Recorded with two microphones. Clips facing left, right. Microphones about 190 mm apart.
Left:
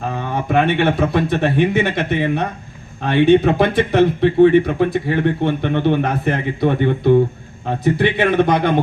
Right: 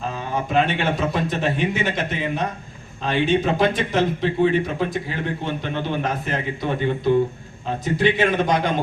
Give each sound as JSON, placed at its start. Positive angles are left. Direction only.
{"t": 0.1, "sound": "speech", "side_deg": 60}